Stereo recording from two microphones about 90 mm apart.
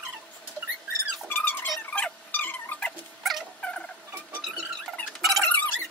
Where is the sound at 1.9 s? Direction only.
15° left (ahead or behind).